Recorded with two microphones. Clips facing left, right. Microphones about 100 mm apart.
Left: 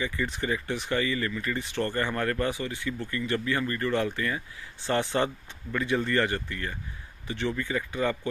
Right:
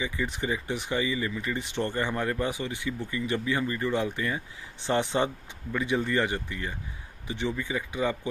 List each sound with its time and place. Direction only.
0.0 s speech: 15° right (ahead or behind)